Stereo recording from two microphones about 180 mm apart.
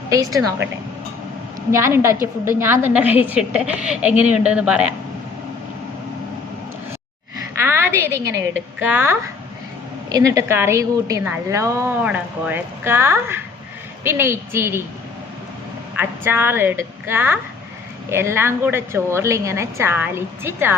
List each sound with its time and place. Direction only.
0.1 s a woman's voice: 20° right (ahead or behind)
1.7 s a woman's voice: 15° right (ahead or behind)
7.6 s a sound: 15° right (ahead or behind)
8.4 s a woman's voice: 10° right (ahead or behind)
16.0 s a woman's voice: 10° right (ahead or behind)